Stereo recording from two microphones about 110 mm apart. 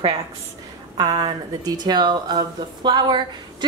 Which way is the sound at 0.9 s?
35° right (ahead or behind).